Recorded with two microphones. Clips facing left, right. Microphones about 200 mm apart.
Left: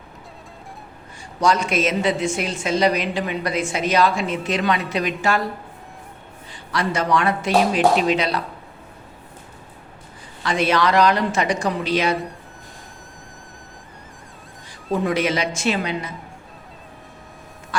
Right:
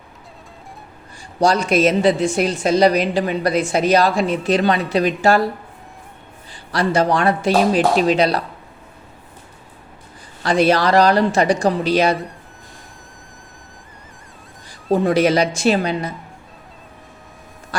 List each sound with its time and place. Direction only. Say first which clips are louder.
1.4 s a woman's voice: right 4 dB; 35° right (ahead or behind)
6.7 s a woman's voice: right 4 dB; 35° right (ahead or behind)
10.4 s a woman's voice: right 4 dB; 35° right (ahead or behind)
12.1 s speech: even; centre (ahead or behind)
14.9 s a woman's voice: right 6 dB; 35° right (ahead or behind)